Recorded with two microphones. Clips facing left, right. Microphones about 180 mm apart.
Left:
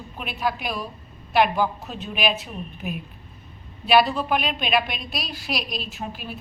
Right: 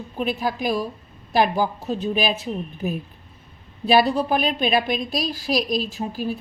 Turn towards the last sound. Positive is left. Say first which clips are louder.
# right 7 dB
turn(degrees=-40)  # may be behind; listen again after turning